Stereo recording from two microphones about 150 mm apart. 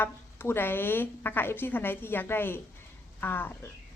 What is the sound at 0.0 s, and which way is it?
A woman's voice, 15° left (ahead or behind).